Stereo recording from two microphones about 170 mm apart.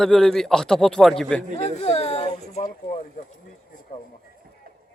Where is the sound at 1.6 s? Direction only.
40° left (ahead or behind).